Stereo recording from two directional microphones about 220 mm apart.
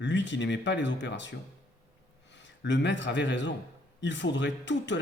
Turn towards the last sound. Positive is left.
turn(degrees=55)  # may be behind; listen again after turning